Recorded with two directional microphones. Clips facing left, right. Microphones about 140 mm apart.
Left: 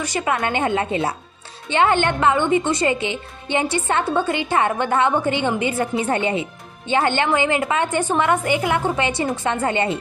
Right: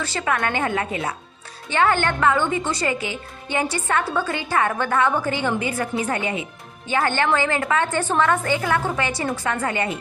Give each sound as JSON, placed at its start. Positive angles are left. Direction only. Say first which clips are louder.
{"t": 0.0, "sound": "a woman's voice", "louder": "left 2 dB", "side_deg": 15}